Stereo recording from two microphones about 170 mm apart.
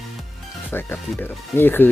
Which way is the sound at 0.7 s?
10° left (ahead or behind).